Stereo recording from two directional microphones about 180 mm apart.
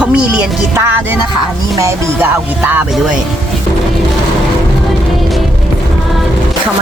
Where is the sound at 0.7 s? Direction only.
15° right (ahead or behind).